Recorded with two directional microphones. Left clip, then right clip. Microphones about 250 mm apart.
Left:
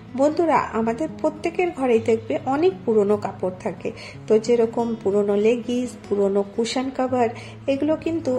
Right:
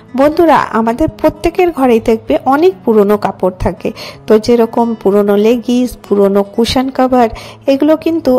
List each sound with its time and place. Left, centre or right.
0.1 s a woman's voice: right